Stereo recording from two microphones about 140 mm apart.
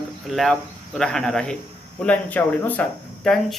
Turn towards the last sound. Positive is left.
turn(degrees=5)  # may be behind; listen again after turning